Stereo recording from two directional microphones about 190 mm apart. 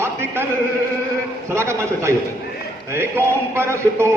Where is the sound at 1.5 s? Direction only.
15° right (ahead or behind).